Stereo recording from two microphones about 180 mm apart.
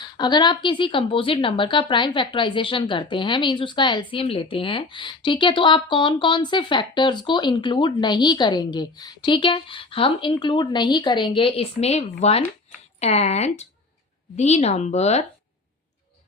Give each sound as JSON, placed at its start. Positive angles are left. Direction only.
{"t": 0.2, "sound": "speech", "side_deg": 25}